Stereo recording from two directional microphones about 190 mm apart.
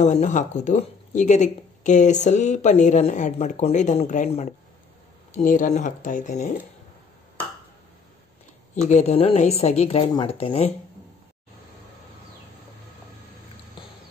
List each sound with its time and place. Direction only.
0.0 s speech: 40° left (ahead or behind)
8.8 s speech: 35° left (ahead or behind)